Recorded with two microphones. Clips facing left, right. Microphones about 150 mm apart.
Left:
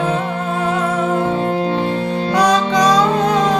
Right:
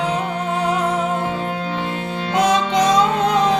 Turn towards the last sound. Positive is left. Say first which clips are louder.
# left 2 dB
turn(degrees=-25)  # may be behind; listen again after turning